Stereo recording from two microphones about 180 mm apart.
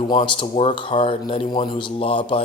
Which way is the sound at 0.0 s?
30° left (ahead or behind).